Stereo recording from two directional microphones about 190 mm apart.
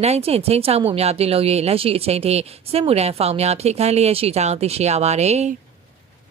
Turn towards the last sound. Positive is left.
turn(degrees=-35)  # may be behind; listen again after turning